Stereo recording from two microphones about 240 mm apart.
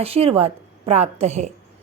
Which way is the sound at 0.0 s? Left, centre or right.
Right.